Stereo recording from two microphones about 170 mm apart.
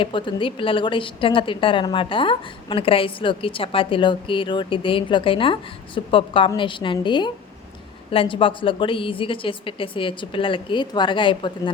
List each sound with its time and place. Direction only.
0.0 s a woman's voice: 30° left (ahead or behind)